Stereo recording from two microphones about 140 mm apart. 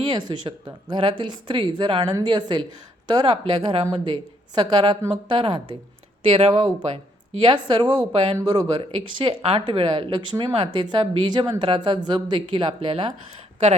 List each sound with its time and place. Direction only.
0.1 s speech: 35° right (ahead or behind)
6.5 s speech: 30° right (ahead or behind)
8.1 s speech: 45° right (ahead or behind)
8.4 s speech: 30° right (ahead or behind)
9.0 s speech: 40° right (ahead or behind)